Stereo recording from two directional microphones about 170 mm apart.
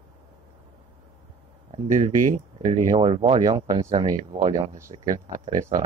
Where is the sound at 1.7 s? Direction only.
35° right (ahead or behind).